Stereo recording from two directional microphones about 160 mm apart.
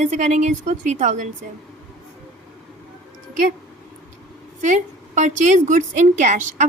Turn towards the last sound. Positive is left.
turn(degrees=-50)  # may be behind; listen again after turning